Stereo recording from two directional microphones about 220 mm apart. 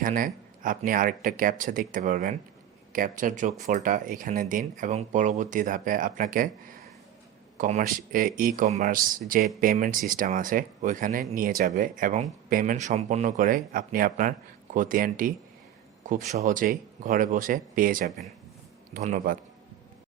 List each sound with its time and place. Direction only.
0.0 s speech: 40° right (ahead or behind)